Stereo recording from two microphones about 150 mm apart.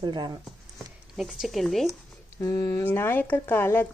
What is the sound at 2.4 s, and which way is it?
Speech, 25° left (ahead or behind).